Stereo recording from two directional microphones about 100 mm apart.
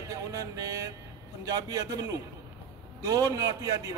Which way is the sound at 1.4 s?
35° right (ahead or behind).